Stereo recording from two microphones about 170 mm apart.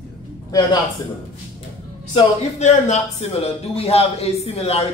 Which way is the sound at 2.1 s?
45° left (ahead or behind).